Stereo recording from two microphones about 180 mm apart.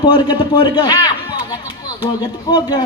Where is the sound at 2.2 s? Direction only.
25° left (ahead or behind).